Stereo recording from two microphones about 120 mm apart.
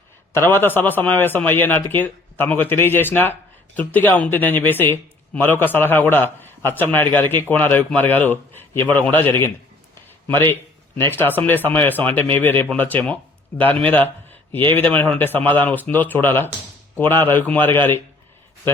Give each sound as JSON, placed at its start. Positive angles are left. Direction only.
{"t": 0.3, "sound": "speech", "side_deg": 20}